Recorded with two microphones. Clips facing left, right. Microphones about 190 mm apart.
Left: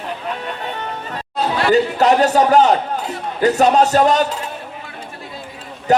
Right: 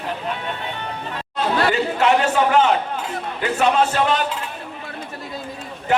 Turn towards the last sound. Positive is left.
turn(degrees=40)  # may be behind; listen again after turning